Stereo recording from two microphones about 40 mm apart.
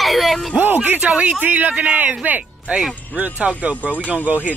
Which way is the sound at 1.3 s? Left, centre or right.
Right.